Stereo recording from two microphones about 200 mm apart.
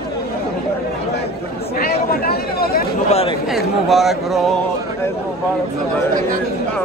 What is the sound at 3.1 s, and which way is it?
Speech, 30° left (ahead or behind).